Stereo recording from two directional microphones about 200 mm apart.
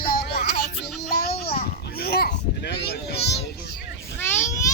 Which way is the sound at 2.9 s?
50° left (ahead or behind).